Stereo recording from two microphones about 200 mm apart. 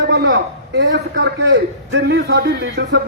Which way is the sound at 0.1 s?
60° right (ahead or behind).